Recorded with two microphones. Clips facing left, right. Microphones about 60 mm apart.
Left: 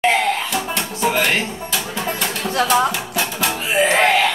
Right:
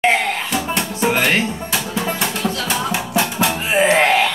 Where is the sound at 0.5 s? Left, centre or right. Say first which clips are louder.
Right 2 dB; right.